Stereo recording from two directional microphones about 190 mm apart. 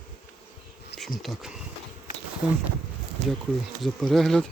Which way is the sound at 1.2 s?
Centre (ahead or behind).